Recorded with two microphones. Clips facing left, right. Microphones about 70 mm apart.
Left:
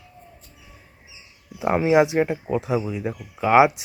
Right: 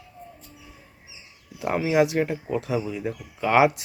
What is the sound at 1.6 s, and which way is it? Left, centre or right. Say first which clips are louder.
Speech: left 4 dB; left.